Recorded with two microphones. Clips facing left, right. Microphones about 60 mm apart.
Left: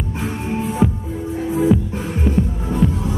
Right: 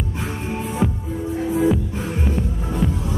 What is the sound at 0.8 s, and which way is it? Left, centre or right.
Music, centre.